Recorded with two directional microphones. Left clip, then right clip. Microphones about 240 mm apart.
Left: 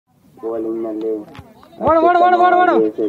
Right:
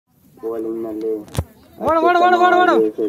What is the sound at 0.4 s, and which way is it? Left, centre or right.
Speech, left.